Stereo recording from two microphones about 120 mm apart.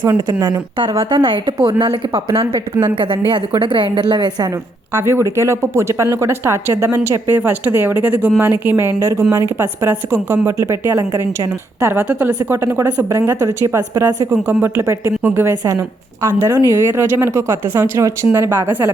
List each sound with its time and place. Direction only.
0.0 s speech: 25° right (ahead or behind)
0.8 s a woman's voice: 40° right (ahead or behind)
4.9 s speech: 20° right (ahead or behind)
11.9 s a woman's voice: 10° right (ahead or behind)
12.3 s speech: 25° right (ahead or behind)
14.3 s speech: 15° right (ahead or behind)